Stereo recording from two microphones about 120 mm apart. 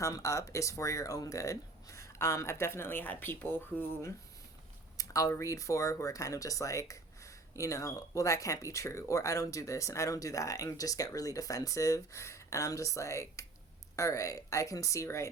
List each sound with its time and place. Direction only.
0.0 s speech: 25° left (ahead or behind)
4.9 s speech: 30° left (ahead or behind)